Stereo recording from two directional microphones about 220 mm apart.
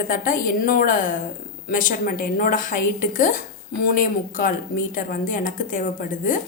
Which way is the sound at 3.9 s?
40° left (ahead or behind).